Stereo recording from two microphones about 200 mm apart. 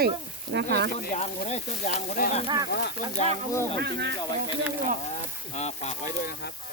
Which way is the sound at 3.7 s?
55° right (ahead or behind).